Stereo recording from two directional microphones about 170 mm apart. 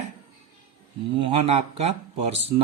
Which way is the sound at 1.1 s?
35° right (ahead or behind).